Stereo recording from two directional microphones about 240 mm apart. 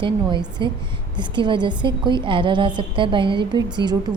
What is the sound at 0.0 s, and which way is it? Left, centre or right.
A woman's voice, centre.